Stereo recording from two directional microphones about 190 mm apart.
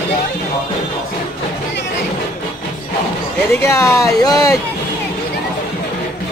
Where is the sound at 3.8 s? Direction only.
15° left (ahead or behind).